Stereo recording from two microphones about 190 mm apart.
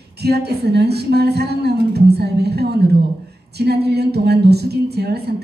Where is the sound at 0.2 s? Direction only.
60° right (ahead or behind).